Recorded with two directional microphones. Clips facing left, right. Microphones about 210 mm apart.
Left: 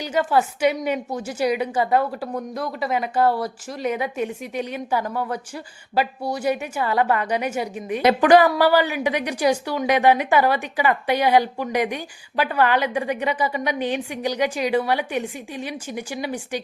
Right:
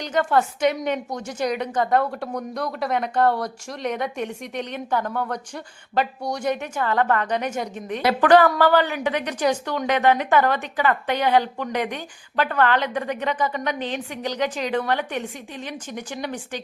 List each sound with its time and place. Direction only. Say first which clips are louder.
0.0 s a woman's voice: even; 5° left (ahead or behind)